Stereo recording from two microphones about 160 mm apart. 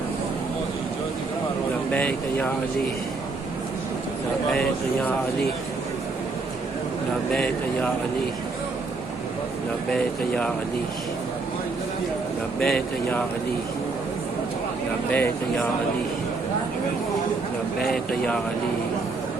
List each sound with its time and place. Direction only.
1.9 s speech: 10° left (ahead or behind)
7.3 s speech: 5° left (ahead or behind)
9.9 s speech: 5° left (ahead or behind)
12.5 s speech: 5° left (ahead or behind)
15.1 s speech: 10° left (ahead or behind)
17.7 s speech: 5° left (ahead or behind)